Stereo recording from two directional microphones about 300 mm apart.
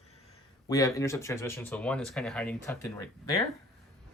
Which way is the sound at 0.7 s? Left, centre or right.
Centre.